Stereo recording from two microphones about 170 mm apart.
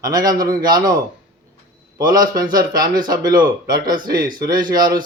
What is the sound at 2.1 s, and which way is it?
Speech, 20° right (ahead or behind).